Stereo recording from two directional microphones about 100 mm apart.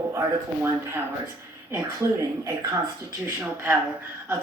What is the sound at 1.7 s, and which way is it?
Speech, 35° right (ahead or behind).